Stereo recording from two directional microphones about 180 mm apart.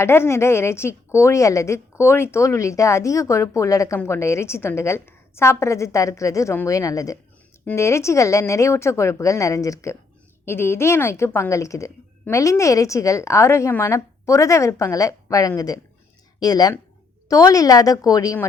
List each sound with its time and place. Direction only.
0.0 s a woman's voice: 15° left (ahead or behind)